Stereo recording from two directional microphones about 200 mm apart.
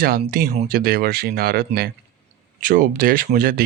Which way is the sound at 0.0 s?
50° right (ahead or behind).